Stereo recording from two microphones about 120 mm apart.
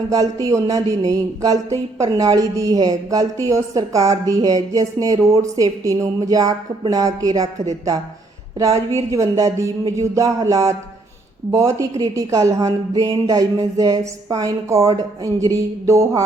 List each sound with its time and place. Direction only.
0.4 s a woman's voice: 25° right (ahead or behind)
8.5 s a woman's voice: 30° right (ahead or behind)